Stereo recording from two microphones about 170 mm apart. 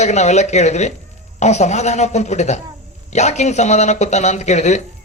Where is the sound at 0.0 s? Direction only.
40° left (ahead or behind).